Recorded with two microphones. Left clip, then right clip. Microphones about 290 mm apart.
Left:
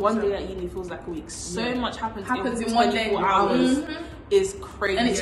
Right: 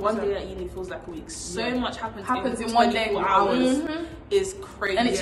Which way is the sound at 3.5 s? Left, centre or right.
Centre.